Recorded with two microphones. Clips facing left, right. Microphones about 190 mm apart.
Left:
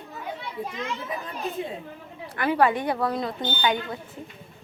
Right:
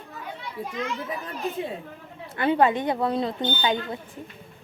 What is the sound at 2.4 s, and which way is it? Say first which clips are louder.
A woman's voice: right 1 dB; 25° right (ahead or behind).